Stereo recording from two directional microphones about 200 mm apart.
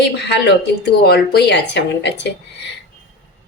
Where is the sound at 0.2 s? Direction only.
60° left (ahead or behind).